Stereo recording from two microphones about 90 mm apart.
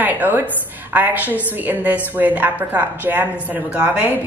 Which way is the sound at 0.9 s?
20° right (ahead or behind).